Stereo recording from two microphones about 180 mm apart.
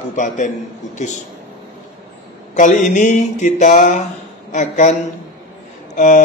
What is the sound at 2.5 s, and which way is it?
A man's voice, 45° left (ahead or behind).